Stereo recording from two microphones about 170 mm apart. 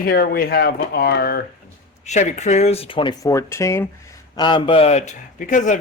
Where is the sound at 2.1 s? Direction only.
45° left (ahead or behind); by 3.9 s 15° left (ahead or behind).